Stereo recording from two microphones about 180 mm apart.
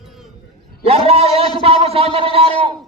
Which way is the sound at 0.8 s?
35° right (ahead or behind).